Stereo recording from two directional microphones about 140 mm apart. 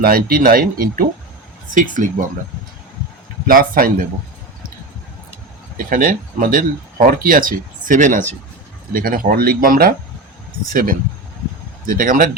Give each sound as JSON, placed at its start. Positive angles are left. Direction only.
{"t": 0.0, "sound": "speech", "side_deg": -90}
{"t": 1.7, "sound": "speech", "side_deg": -70}
{"t": 3.4, "sound": "speech", "side_deg": -90}
{"t": 5.7, "sound": "speech", "side_deg": -85}
{"t": 8.9, "sound": "speech", "side_deg": -90}